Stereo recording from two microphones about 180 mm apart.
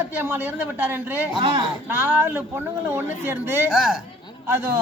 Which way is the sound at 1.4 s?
25° right (ahead or behind).